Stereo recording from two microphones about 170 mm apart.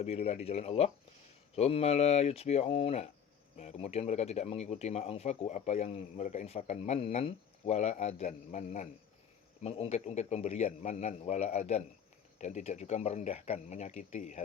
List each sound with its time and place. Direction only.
0.0 s speech: 35° left (ahead or behind)